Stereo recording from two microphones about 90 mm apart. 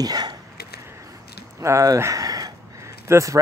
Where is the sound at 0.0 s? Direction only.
45° right (ahead or behind).